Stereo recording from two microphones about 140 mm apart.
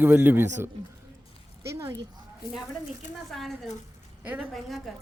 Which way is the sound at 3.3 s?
Centre (ahead or behind).